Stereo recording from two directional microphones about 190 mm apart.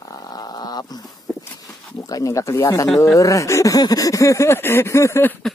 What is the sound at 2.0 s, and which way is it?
Speech, 20° left (ahead or behind).